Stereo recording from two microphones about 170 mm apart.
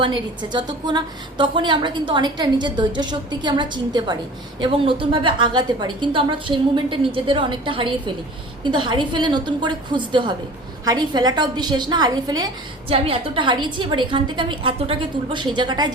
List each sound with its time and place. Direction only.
0.0 s a woman's voice: 25° right (ahead or behind)